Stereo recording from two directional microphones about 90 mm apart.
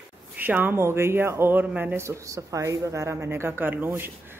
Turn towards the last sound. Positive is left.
turn(degrees=-25)  # may be behind; listen again after turning